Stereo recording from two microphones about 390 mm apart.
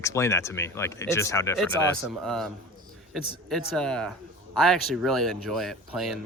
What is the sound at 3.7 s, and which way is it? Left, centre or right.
Speech, centre.